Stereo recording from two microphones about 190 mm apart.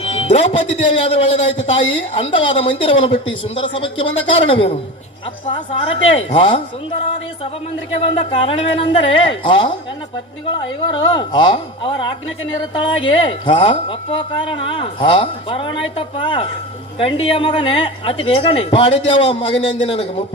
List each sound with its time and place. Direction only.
0.0 s music: 30° left (ahead or behind)
1.0 s a woman's voice: 30° left (ahead or behind)
8.1 s a woman's voice: 30° left (ahead or behind)
10.9 s a woman's voice: 25° left (ahead or behind)